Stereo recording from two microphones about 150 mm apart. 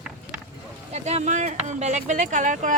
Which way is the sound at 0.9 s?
50° right (ahead or behind).